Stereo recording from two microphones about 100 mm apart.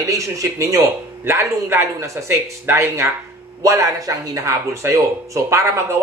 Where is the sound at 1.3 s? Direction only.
25° right (ahead or behind).